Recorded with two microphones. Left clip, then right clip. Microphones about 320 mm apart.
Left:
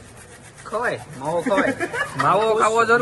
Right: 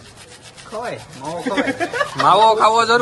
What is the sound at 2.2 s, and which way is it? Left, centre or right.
Speech, centre.